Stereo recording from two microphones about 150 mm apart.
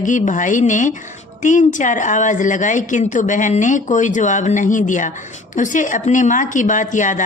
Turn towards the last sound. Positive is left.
turn(degrees=55)  # may be behind; listen again after turning